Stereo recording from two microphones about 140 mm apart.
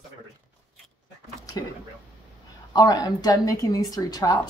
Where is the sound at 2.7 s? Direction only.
30° left (ahead or behind).